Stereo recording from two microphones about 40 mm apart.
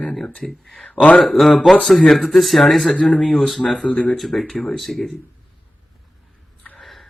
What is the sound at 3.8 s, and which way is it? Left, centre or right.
Speech, left.